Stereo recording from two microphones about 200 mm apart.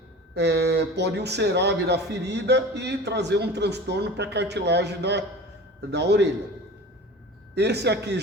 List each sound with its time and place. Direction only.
0.3 s speech: 55° right (ahead or behind)
7.5 s speech: 55° right (ahead or behind)